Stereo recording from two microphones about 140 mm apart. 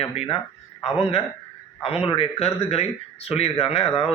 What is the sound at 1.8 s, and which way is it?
A man's voice, 45° left (ahead or behind).